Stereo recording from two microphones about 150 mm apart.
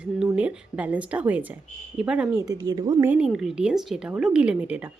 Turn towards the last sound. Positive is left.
turn(degrees=-10)  # may be behind; listen again after turning